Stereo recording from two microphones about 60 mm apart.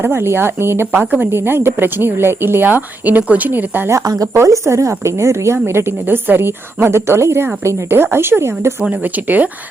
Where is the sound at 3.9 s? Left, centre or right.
Right.